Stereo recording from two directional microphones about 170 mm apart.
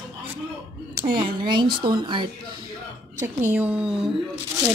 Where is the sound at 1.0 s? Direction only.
25° right (ahead or behind).